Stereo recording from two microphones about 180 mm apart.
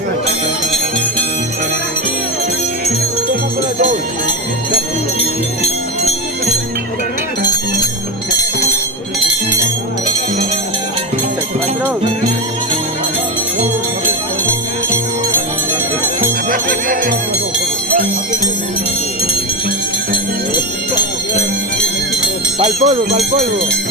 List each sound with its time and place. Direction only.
16.5 s jingle bell: 50° right (ahead or behind)
22.6 s speech: 35° right (ahead or behind)